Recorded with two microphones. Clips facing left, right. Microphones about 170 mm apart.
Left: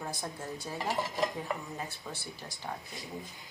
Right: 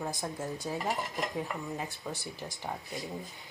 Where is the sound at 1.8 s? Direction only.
20° right (ahead or behind).